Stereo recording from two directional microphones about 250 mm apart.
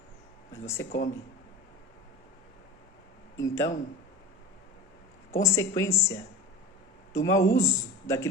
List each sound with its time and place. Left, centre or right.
0.5 s speech: centre
0.9 s speech: left
3.4 s speech: centre
5.4 s speech: centre